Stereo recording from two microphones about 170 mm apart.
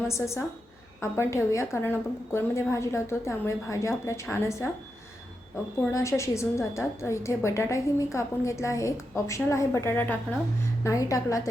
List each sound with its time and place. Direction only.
0.1 s a woman's voice: 15° left (ahead or behind)
5.9 s a woman's voice: 15° left (ahead or behind)